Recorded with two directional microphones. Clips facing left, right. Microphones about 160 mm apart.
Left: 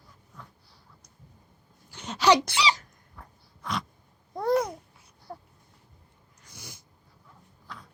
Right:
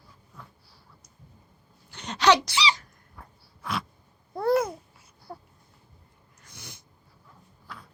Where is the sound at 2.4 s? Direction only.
55° left (ahead or behind).